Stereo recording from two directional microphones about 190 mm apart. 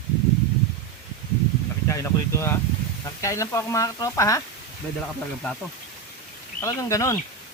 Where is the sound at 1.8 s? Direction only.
15° left (ahead or behind).